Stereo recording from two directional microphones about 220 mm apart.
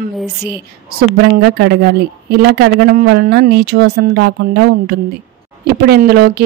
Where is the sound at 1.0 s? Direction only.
50° right (ahead or behind).